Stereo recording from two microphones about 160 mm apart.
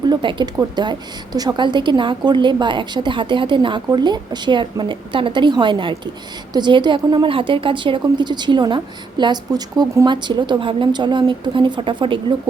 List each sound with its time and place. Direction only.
0.1 s a woman's voice: 30° right (ahead or behind)